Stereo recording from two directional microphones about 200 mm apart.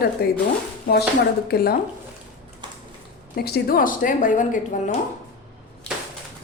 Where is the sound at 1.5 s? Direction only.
50° left (ahead or behind).